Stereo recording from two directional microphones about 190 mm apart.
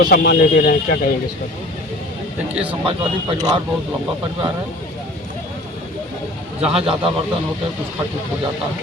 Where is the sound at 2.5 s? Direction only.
5° right (ahead or behind).